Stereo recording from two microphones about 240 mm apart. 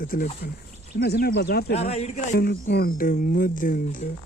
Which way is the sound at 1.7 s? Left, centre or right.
Left.